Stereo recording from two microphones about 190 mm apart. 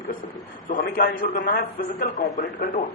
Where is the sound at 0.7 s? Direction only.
45° left (ahead or behind).